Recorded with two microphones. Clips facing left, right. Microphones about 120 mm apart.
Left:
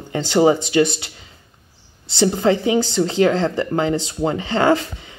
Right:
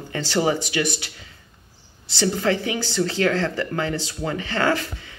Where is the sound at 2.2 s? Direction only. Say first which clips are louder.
Left 5 dB; 25° left (ahead or behind).